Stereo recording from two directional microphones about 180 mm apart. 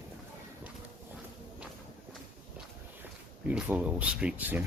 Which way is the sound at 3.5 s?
5° right (ahead or behind).